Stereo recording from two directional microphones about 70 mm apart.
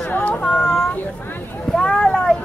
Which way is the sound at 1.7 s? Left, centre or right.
Centre.